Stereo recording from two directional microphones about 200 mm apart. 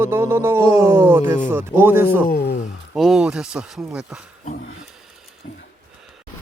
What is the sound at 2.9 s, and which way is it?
Speech, centre (ahead or behind).